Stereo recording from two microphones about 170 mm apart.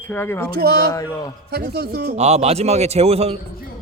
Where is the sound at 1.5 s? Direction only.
70° right (ahead or behind).